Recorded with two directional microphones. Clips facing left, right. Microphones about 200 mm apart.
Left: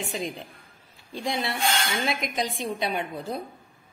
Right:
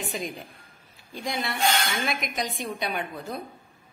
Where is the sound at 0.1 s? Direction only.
25° left (ahead or behind).